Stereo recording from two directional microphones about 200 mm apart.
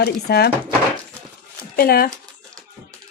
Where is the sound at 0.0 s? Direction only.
55° left (ahead or behind).